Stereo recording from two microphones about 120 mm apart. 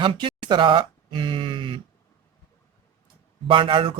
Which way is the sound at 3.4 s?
45° right (ahead or behind).